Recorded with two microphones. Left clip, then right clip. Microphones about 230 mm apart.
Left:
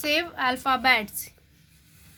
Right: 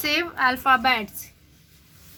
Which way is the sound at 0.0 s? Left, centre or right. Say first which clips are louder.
Right 3 dB; left.